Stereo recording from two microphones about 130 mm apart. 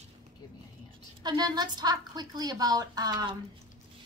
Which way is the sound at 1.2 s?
30° right (ahead or behind).